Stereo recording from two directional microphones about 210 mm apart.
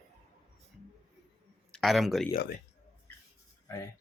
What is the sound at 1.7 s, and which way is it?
Speech, centre (ahead or behind).